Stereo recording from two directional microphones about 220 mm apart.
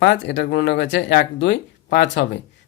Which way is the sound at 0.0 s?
50° left (ahead or behind).